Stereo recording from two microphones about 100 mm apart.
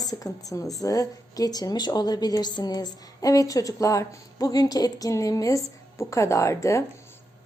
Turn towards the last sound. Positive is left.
turn(degrees=30)  # may be behind; listen again after turning